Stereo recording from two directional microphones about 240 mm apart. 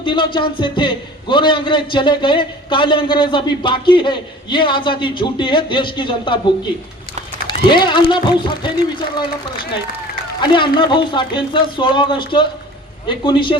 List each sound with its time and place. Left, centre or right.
0.0 s a man's voice: centre
7.4 s a man's voice: centre
10.5 s a man's voice: centre